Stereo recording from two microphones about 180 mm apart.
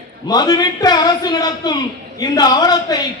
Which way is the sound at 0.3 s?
20° left (ahead or behind).